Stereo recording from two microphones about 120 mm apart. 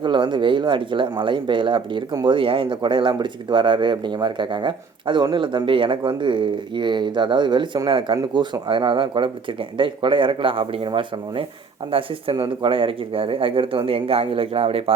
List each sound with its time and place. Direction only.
0.0 s speech: 40° right (ahead or behind)